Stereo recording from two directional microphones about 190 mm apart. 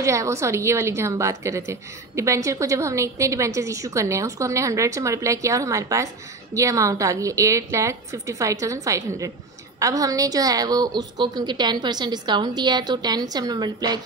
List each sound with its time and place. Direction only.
0.0 s a woman's voice: 15° right (ahead or behind)